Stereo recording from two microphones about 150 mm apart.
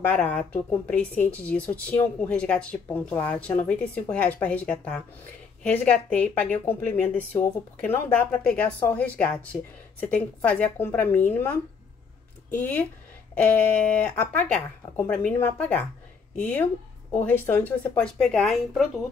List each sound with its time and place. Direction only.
0.0 s speech: 10° left (ahead or behind)